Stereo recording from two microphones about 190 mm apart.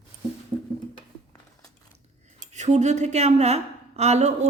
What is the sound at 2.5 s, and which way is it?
A woman's voice, 35° right (ahead or behind).